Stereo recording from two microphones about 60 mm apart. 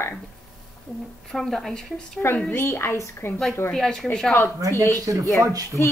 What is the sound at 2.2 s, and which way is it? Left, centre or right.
A woman's voice, left.